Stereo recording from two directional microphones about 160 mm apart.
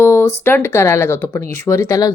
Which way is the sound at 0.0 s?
15° left (ahead or behind).